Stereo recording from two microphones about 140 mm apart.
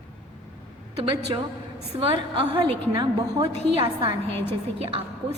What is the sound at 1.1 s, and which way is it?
Speech, 30° right (ahead or behind).